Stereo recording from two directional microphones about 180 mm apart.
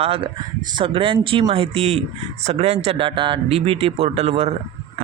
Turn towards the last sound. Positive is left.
turn(degrees=-35)  # may be behind; listen again after turning